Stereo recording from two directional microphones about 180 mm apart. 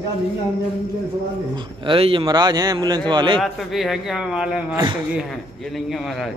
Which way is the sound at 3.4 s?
Centre (ahead or behind).